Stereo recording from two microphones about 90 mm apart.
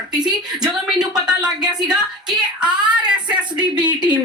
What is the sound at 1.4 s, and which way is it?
Speech, 45° right (ahead or behind).